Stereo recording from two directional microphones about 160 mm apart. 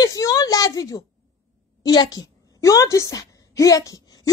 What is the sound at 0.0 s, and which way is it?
A woman's voice, 20° left (ahead or behind).